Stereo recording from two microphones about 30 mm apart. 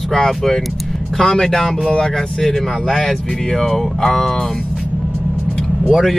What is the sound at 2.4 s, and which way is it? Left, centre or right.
Speech, centre.